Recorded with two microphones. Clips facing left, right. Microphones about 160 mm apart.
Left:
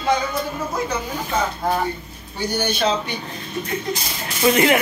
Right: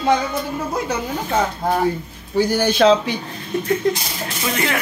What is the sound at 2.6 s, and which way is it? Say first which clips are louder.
Speech: right 7 dB; 90° right.